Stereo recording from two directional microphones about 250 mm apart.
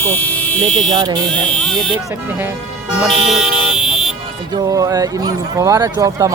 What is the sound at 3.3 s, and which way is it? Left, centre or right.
Vehicle, centre.